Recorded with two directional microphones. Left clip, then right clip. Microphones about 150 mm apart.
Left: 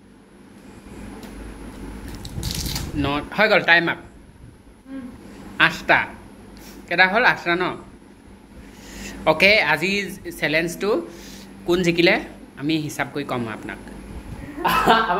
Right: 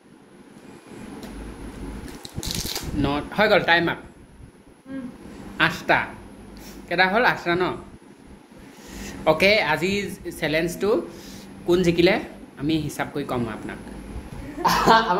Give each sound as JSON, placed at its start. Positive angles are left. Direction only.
{"t": 2.4, "sound": "speech", "side_deg": -15}
{"t": 5.6, "sound": "speech", "side_deg": -15}
{"t": 8.9, "sound": "a woman's voice", "side_deg": -10}